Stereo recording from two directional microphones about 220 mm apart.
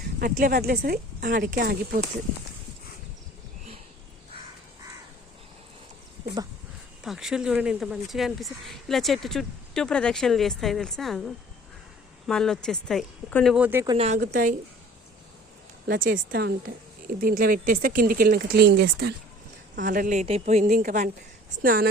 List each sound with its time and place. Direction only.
0.2 s speech: 40° right (ahead or behind)
7.0 s speech: centre (ahead or behind)
13.9 s a woman's voice: 30° right (ahead or behind)
14.2 s speech: 40° right (ahead or behind)
15.9 s speech: 40° right (ahead or behind)
19.7 s speech: 35° right (ahead or behind)